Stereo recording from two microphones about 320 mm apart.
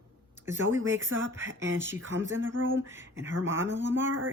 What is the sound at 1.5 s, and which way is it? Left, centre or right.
Speech, right.